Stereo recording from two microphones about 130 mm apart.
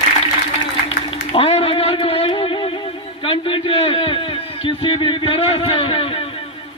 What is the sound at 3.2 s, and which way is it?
A man's voice, 45° left (ahead or behind).